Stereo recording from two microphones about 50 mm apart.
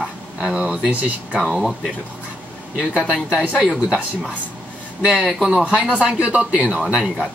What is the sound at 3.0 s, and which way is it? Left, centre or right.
Speech, centre.